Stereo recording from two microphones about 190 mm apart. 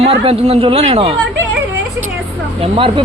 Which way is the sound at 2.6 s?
30° right (ahead or behind).